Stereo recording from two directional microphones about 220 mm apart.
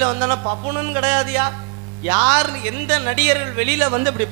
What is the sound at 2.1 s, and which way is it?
Speech, 20° right (ahead or behind).